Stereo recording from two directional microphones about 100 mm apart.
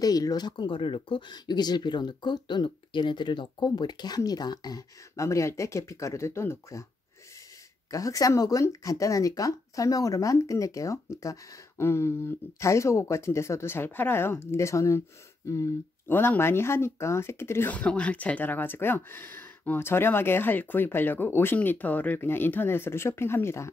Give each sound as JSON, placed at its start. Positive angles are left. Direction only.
{"t": 0.0, "sound": "speech", "side_deg": 40}
{"t": 7.9, "sound": "speech", "side_deg": 35}